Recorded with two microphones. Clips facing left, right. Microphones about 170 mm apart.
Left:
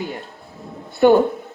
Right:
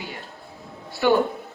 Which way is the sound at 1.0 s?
45° left (ahead or behind).